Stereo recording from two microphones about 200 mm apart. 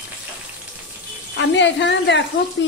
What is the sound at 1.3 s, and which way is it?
Speech, 60° left (ahead or behind).